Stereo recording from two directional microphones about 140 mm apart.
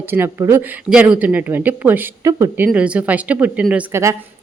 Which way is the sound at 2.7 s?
10° right (ahead or behind).